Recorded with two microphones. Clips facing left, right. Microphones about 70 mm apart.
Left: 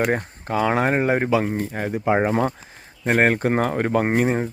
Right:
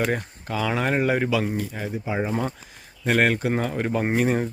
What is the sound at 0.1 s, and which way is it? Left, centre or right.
Speech, left.